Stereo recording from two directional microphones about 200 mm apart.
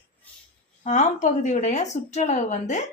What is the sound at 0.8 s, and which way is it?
Speech, 35° left (ahead or behind).